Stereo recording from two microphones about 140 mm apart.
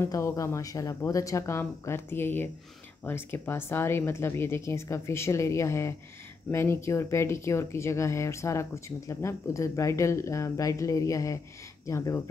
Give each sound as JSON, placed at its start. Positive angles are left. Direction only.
{"t": 0.0, "sound": "speech", "side_deg": 20}